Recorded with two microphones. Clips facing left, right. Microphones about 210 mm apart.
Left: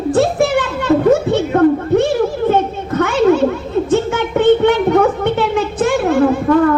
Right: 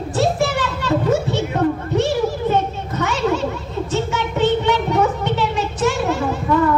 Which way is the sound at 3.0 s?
55° left (ahead or behind).